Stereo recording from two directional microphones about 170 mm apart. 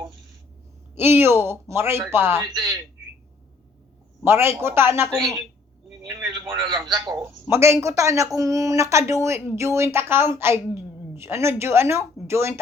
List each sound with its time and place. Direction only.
0.9 s speech: 15° right (ahead or behind)
4.2 s speech: 15° right (ahead or behind)
5.1 s a woman's voice: centre (ahead or behind)
6.0 s a man's voice: 20° right (ahead or behind)